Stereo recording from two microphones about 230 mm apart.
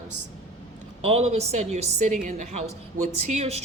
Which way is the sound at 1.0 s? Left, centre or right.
Right.